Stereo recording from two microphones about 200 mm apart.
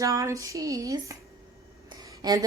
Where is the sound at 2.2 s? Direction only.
20° right (ahead or behind).